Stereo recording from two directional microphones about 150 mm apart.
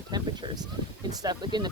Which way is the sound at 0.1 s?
25° right (ahead or behind).